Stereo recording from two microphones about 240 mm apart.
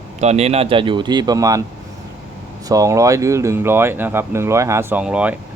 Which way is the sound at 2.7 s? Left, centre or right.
Centre.